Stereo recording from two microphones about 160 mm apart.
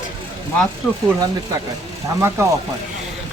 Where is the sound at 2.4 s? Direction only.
20° right (ahead or behind).